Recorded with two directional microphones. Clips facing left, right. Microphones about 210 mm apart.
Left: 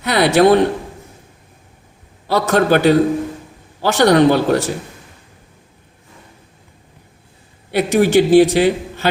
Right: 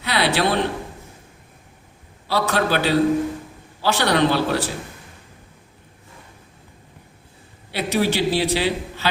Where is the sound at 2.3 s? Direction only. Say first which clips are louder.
Left 7 dB; 45° left (ahead or behind).